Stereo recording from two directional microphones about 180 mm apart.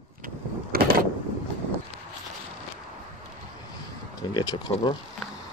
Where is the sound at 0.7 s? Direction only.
55° right (ahead or behind).